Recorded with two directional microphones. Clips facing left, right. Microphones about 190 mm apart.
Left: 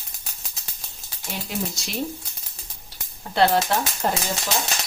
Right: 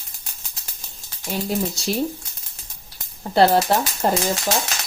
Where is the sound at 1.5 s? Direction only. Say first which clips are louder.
Right 5 dB; 35° right (ahead or behind).